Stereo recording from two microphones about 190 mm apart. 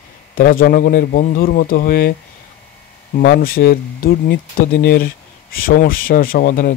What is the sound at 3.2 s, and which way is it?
Speech, 50° left (ahead or behind).